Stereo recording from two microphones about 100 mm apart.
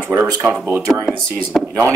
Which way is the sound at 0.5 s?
15° right (ahead or behind).